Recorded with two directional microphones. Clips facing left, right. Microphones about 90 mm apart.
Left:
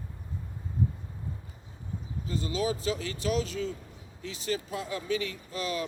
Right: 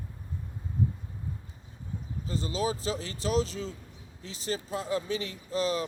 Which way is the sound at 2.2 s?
35° right (ahead or behind).